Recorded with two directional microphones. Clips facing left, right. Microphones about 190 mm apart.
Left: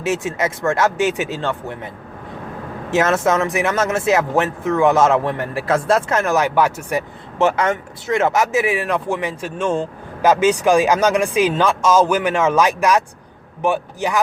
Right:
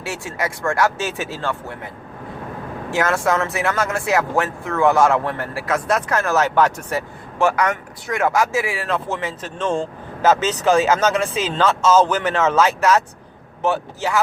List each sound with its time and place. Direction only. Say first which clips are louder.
0.0 s speech: left 6 dB; 20° left (ahead or behind)
2.9 s speech: left 3 dB; 20° left (ahead or behind)
5.6 s speech: left 4 dB; 30° left (ahead or behind); by 7.0 s 10° left (ahead or behind)
7.3 s speech: left 2 dB; 25° left (ahead or behind)